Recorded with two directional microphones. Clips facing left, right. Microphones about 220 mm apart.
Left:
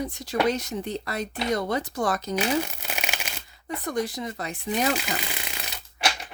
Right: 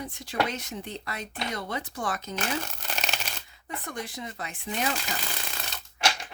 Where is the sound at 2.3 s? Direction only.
10° left (ahead or behind).